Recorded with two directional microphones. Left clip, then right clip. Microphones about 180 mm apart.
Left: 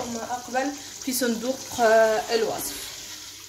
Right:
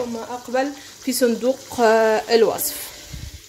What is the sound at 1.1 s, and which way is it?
A woman's voice, 30° right (ahead or behind).